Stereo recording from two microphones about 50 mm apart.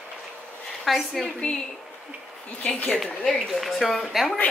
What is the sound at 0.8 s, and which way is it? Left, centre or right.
Speech, centre.